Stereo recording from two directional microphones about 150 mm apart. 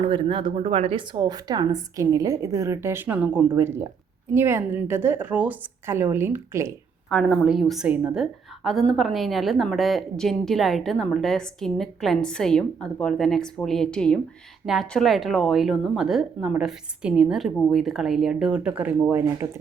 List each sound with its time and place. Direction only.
0.0 s a woman's voice: 35° right (ahead or behind); by 6.7 s 20° right (ahead or behind)
7.1 s a woman's voice: centre (ahead or behind)